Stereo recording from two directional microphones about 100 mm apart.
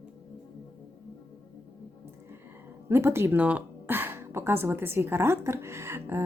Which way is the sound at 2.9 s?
25° right (ahead or behind).